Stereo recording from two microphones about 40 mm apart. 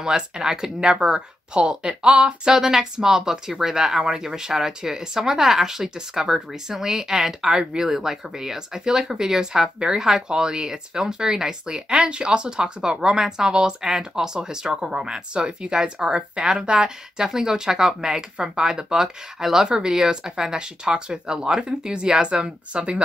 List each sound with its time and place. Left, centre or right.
0.0 s speech: centre